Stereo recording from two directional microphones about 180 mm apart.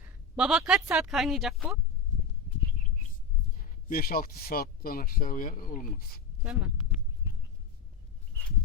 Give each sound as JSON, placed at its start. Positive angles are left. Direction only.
{"t": 0.3, "sound": "a woman's voice", "side_deg": -5}
{"t": 3.8, "sound": "speech", "side_deg": 55}
{"t": 6.4, "sound": "a woman's voice", "side_deg": -5}